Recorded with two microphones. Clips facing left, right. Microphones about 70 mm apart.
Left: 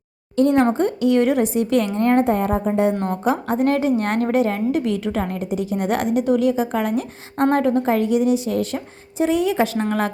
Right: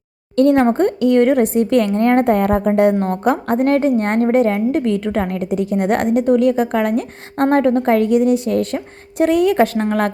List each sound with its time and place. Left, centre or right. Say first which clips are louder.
0.3 s a woman's voice: right 4 dB; right
3.2 s a woman's voice: right 3 dB; right